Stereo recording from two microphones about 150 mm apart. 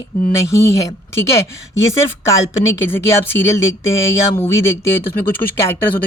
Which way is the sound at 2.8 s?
15° left (ahead or behind).